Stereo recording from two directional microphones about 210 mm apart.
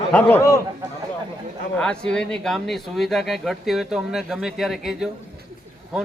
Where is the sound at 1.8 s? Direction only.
5° left (ahead or behind).